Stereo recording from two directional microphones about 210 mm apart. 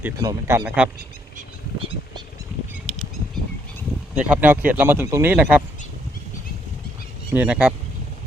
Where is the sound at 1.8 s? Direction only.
25° right (ahead or behind).